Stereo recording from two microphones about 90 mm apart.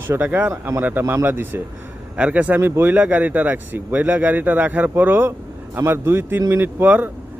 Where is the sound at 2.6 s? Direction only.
25° right (ahead or behind).